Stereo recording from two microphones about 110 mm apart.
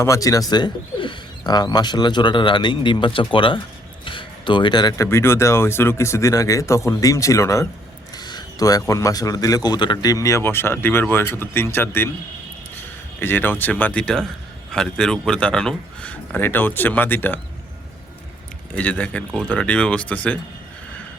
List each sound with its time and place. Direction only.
0.0 s speech: 30° left (ahead or behind); by 3.6 s 50° left (ahead or behind)
4.0 s a sound: 50° left (ahead or behind)
4.9 s speech: 25° left (ahead or behind)
8.1 s speech: 40° left (ahead or behind); by 12.1 s 20° left (ahead or behind)
13.1 s speech: 20° left (ahead or behind)
18.7 s speech: 15° left (ahead or behind)